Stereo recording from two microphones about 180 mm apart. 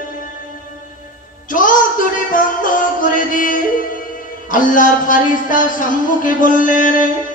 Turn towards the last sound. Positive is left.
turn(degrees=45)  # may be behind; listen again after turning